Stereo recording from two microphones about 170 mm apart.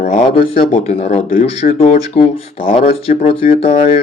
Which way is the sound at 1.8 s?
40° left (ahead or behind).